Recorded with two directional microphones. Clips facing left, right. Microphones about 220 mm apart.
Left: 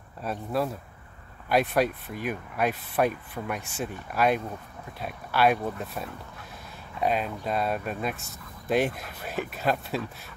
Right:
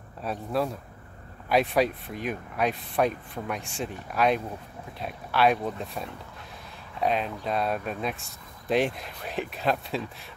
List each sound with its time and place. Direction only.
0.2 s speech: centre (ahead or behind)